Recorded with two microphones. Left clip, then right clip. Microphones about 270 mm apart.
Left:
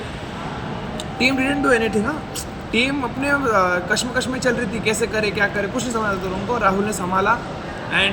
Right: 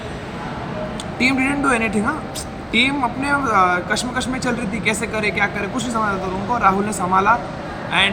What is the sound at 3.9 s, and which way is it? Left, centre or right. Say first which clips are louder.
Speech: left 1 dB; right.